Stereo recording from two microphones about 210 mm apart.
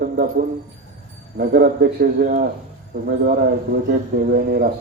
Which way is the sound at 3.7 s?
45° right (ahead or behind).